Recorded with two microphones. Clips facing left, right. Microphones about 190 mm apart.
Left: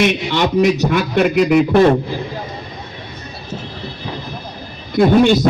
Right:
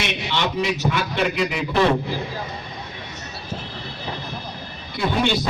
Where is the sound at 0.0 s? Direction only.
50° left (ahead or behind).